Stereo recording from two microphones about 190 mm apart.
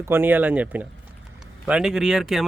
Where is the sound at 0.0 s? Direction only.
10° right (ahead or behind).